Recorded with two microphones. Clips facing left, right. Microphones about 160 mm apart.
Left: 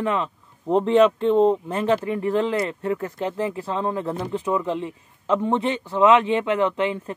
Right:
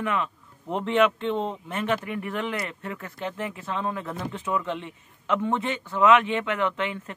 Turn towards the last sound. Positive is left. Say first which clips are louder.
# left 5 dB
turn(degrees=30)  # may be behind; listen again after turning